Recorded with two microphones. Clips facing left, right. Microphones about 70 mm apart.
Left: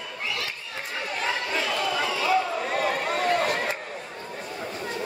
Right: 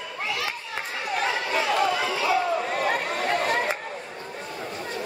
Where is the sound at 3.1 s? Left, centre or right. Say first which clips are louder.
Left 1 dB; centre.